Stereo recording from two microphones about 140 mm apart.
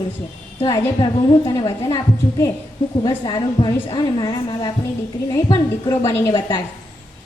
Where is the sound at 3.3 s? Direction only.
30° left (ahead or behind).